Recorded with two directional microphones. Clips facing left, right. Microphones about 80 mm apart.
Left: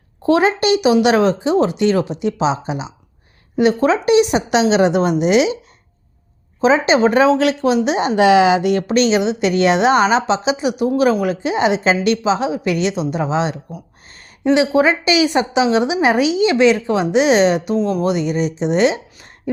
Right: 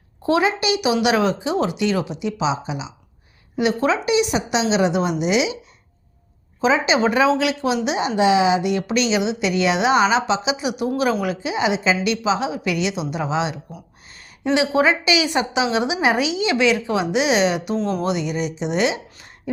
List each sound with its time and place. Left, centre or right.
0.3 s speech: left
1.0 s speech: left
3.6 s a woman's voice: left
4.0 s speech: left
6.6 s a woman's voice: left
11.5 s speech: left
12.2 s a woman's voice: left
16.2 s speech: right
16.5 s a woman's voice: left